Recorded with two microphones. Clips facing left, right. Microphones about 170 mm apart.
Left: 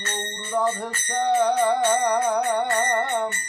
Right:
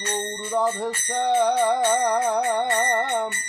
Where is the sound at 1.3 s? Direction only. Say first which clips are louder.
Even; 15° right (ahead or behind).